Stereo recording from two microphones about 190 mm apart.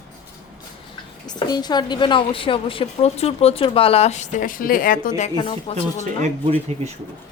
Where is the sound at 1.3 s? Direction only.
20° left (ahead or behind); by 5.3 s 45° left (ahead or behind).